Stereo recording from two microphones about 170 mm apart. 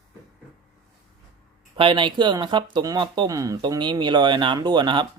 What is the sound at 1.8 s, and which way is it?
Speech, 30° right (ahead or behind).